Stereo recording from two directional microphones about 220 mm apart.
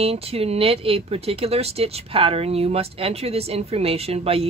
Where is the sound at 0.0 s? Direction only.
25° right (ahead or behind).